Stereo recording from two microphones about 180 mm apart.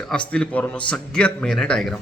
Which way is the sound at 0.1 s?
5° left (ahead or behind).